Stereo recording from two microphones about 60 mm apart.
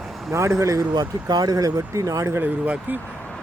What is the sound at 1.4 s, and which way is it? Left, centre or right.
Speech, right.